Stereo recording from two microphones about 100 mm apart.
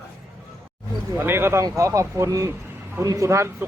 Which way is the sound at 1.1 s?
20° right (ahead or behind).